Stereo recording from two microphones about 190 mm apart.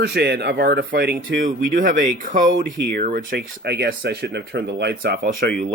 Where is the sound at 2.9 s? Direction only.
60° right (ahead or behind).